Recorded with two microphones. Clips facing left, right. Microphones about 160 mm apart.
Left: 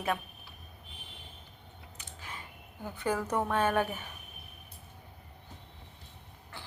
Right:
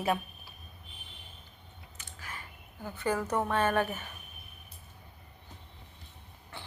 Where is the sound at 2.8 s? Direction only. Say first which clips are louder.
Right 1 dB; 10° left (ahead or behind).